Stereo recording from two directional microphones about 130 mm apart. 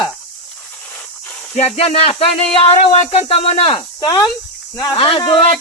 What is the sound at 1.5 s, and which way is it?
Speech, 55° left (ahead or behind).